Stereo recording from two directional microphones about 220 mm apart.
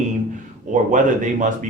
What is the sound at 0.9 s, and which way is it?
Speech, 35° right (ahead or behind).